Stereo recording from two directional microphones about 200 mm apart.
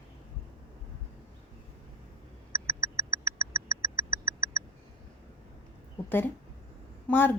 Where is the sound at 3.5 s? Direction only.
15° right (ahead or behind).